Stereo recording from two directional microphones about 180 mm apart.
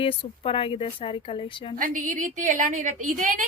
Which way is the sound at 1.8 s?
50° right (ahead or behind).